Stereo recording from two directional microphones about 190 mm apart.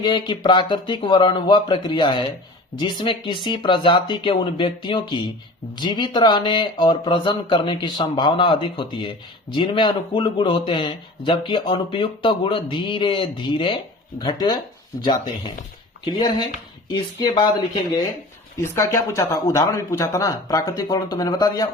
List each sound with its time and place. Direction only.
0.0 s speech: 25° left (ahead or behind)
18.6 s speech: 15° left (ahead or behind)